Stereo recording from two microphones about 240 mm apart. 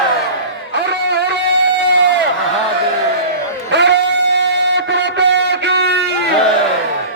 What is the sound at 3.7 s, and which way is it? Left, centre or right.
Music, right.